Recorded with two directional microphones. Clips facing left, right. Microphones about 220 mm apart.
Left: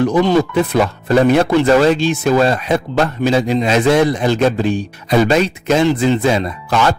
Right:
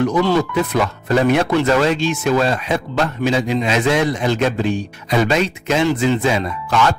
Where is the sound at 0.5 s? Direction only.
30° left (ahead or behind).